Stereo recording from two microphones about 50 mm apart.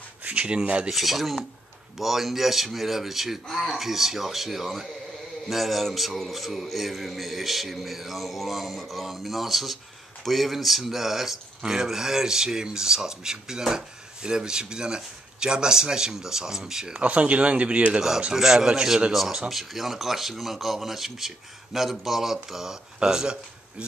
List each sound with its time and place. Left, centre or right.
0.2 s speech: right
0.8 s a man's voice: centre
17.0 s speech: right
18.3 s speech: centre
19.5 s a man's voice: centre